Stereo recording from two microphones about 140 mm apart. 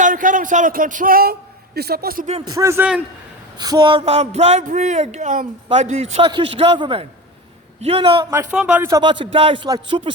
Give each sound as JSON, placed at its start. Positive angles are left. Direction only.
{"t": 0.0, "sound": "speech", "side_deg": -70}
{"t": 2.6, "sound": "speech", "side_deg": -20}
{"t": 5.6, "sound": "a man's voice", "side_deg": -45}
{"t": 8.3, "sound": "speech", "side_deg": -20}
{"t": 8.9, "sound": "a man's voice", "side_deg": -35}